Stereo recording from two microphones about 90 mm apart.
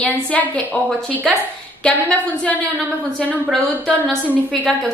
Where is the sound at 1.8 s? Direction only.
10° left (ahead or behind).